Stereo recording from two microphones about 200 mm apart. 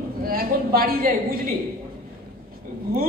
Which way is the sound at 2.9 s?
50° right (ahead or behind).